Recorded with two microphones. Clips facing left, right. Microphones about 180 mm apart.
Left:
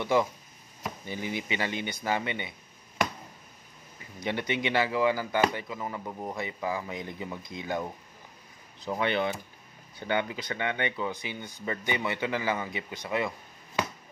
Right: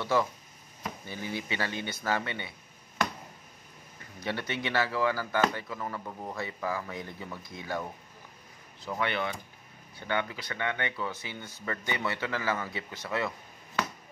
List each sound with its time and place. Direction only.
0.0 s speech: 15° left (ahead or behind)
4.2 s speech: 15° left (ahead or behind)